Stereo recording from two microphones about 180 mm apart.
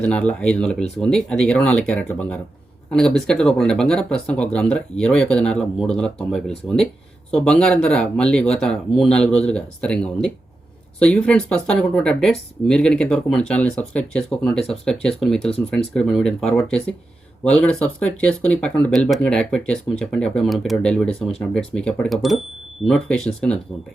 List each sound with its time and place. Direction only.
0.0 s speech: 5° left (ahead or behind)